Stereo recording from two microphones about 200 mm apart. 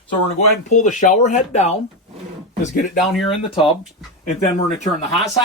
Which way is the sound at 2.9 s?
Centre (ahead or behind).